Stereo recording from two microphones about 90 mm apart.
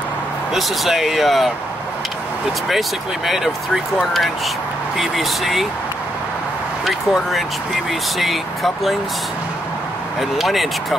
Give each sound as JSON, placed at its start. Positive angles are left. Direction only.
{"t": 0.6, "sound": "speech", "side_deg": 0}
{"t": 3.3, "sound": "speech", "side_deg": 0}
{"t": 6.9, "sound": "speech", "side_deg": 0}
{"t": 10.3, "sound": "speech", "side_deg": 0}